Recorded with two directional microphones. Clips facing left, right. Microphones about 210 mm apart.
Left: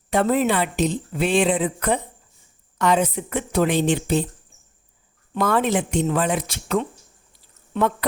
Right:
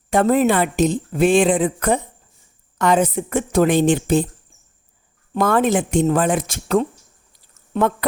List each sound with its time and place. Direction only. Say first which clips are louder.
0.1 s a woman's voice: right 4 dB; 45° right (ahead or behind)
5.3 s a woman's voice: right 3 dB; 50° right (ahead or behind)